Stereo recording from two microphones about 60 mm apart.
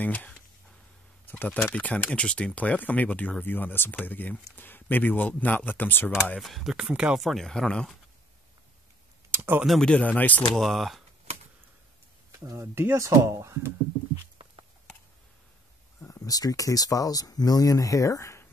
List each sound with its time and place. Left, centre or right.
0.0 s speech: left
6.4 s speech: centre
6.9 s speech: centre
7.2 s speech: centre
9.3 s a sound: right
9.8 s speech: centre
10.0 s speech: left
10.5 s speech: centre
12.7 s speech: right
13.0 s speech: right
16.2 s speech: left